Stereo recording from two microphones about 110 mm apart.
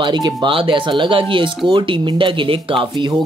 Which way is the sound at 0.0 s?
45° right (ahead or behind).